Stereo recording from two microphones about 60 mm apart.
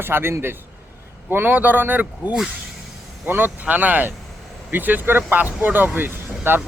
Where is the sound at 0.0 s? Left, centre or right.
Right.